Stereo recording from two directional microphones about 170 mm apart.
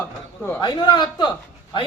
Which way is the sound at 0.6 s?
25° left (ahead or behind).